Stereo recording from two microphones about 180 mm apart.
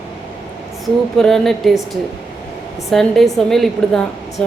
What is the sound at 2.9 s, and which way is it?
A man's voice, centre (ahead or behind).